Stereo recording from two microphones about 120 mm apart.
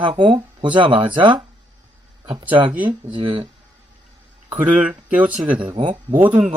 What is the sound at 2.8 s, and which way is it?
Speech, 45° right (ahead or behind).